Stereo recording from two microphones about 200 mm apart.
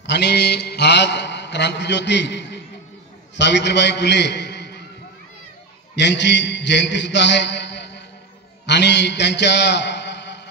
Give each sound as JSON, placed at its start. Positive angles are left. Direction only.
{"t": 0.0, "sound": "mantra", "side_deg": 60}
{"t": 3.3, "sound": "a man's voice", "side_deg": 60}
{"t": 5.9, "sound": "a man's voice", "side_deg": 60}
{"t": 8.6, "sound": "a sound", "side_deg": 60}